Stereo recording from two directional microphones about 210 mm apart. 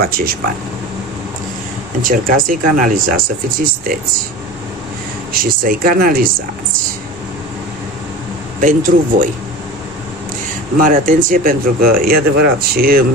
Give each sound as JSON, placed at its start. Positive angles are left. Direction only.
{"t": 0.0, "sound": "speech", "side_deg": -45}
{"t": 2.0, "sound": "speech", "side_deg": -40}
{"t": 5.3, "sound": "speech", "side_deg": -45}
{"t": 8.5, "sound": "speech", "side_deg": -40}
{"t": 10.8, "sound": "speech", "side_deg": -40}